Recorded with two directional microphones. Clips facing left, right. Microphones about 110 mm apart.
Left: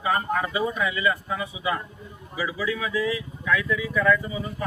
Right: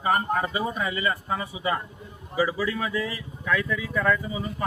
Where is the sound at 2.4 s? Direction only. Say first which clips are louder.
Right 2 dB; 55° right (ahead or behind).